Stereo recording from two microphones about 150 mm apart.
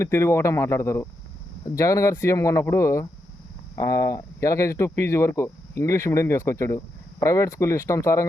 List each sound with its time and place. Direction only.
0.0 s speech: 20° left (ahead or behind)